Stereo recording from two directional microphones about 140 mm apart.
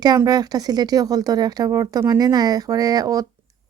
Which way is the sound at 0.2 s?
25° right (ahead or behind).